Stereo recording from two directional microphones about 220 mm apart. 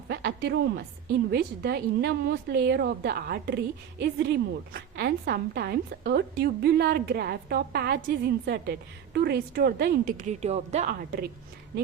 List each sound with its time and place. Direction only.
0.1 s a woman's voice: 50° right (ahead or behind)